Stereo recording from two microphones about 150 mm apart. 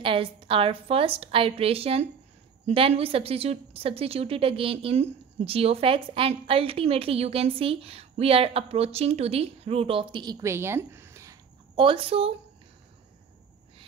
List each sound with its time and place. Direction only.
0.0 s a woman's voice: 35° right (ahead or behind); by 11.3 s 20° right (ahead or behind)
11.7 s a woman's voice: 35° right (ahead or behind)